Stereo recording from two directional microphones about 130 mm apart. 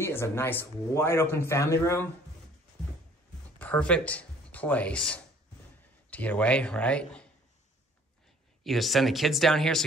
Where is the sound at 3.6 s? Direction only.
10° left (ahead or behind).